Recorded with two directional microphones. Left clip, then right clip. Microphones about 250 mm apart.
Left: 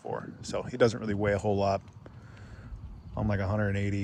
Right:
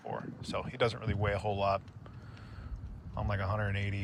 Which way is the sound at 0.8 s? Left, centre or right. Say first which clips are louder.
Left 7 dB; left.